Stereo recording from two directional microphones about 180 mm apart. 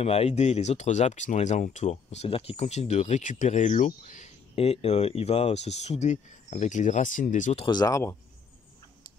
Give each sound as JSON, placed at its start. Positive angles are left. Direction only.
{"t": 0.0, "sound": "speech", "side_deg": 35}
{"t": 7.6, "sound": "speech", "side_deg": 20}